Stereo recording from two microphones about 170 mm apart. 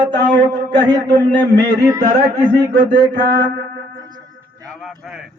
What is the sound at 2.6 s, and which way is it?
Speech, 75° right (ahead or behind).